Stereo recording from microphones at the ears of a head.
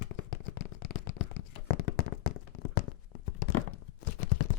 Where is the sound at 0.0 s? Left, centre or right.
Left.